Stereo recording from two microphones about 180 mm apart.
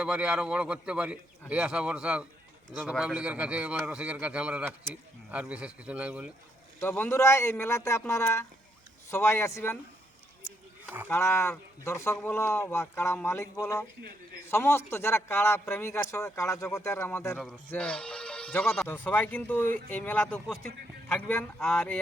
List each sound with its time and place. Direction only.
0.0 s a man's voice: 5° right (ahead or behind)
6.7 s a man's voice: 10° left (ahead or behind)
10.8 s speech: 10° right (ahead or behind)
11.1 s a man's voice: 15° left (ahead or behind)